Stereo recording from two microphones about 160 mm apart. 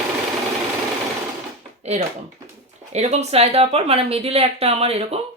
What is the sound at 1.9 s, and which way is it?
Speech, 45° right (ahead or behind).